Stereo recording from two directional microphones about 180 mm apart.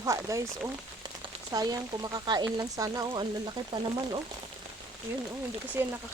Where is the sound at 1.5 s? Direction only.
20° right (ahead or behind).